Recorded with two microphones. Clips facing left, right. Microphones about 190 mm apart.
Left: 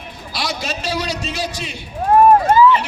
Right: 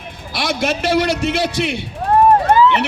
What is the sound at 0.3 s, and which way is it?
A man's voice, 55° right (ahead or behind).